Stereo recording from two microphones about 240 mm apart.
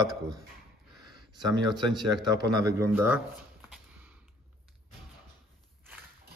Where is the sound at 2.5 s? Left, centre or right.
Centre.